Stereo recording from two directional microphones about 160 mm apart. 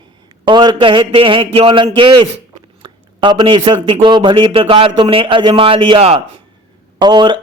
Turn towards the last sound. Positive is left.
turn(degrees=-30)  # may be behind; listen again after turning